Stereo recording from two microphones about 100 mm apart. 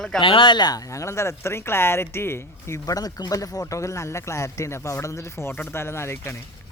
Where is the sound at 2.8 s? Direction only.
40° left (ahead or behind).